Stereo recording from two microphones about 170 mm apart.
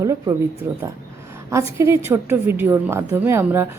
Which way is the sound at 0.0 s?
20° right (ahead or behind).